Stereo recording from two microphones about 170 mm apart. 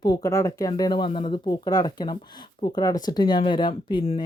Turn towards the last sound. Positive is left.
turn(degrees=30)  # may be behind; listen again after turning